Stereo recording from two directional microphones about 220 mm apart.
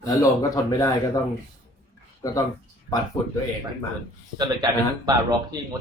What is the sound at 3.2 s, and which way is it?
Speech, 15° left (ahead or behind).